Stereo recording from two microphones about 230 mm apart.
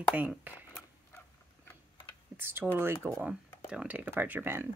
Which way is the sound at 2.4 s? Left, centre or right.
Centre.